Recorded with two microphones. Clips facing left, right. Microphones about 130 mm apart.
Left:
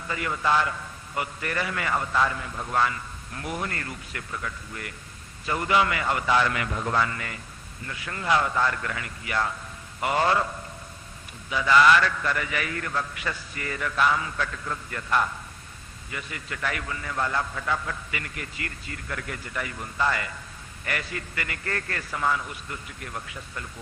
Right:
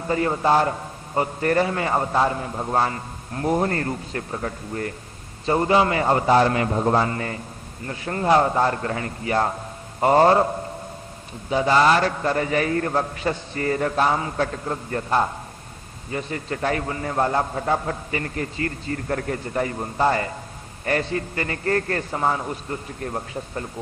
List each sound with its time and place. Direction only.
0.0 s a man's voice: 35° right (ahead or behind)